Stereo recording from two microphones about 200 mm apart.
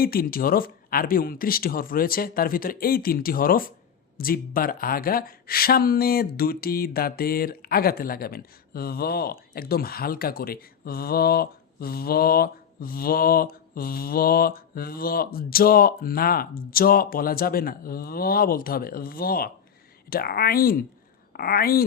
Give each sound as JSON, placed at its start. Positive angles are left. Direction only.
{"t": 0.0, "sound": "speech", "side_deg": 45}